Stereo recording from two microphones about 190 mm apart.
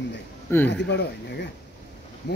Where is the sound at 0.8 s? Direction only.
70° left (ahead or behind).